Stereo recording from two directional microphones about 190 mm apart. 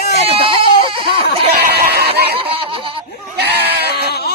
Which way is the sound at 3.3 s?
60° right (ahead or behind).